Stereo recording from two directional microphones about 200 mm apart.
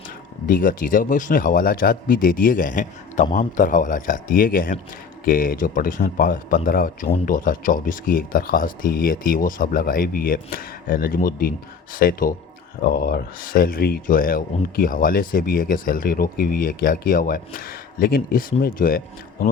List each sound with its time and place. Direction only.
0.4 s speech: 45° left (ahead or behind)